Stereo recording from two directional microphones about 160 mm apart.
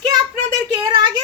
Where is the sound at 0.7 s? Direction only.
25° right (ahead or behind).